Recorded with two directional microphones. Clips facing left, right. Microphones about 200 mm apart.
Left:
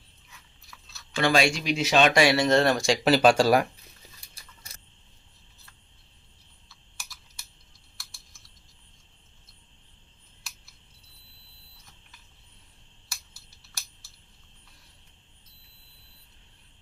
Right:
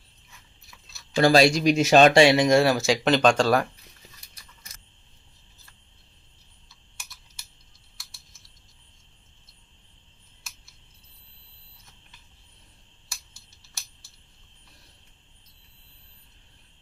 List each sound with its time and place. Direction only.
1.1 s speech: 35° right (ahead or behind)
2.1 s speech: 20° right (ahead or behind); by 3.7 s 10° left (ahead or behind)
6.7 s typing: centre (ahead or behind)